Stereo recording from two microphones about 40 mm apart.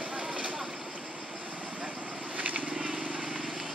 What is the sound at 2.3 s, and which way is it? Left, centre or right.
Vehicle, right.